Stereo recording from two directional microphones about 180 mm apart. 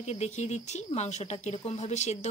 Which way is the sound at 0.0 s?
35° left (ahead or behind).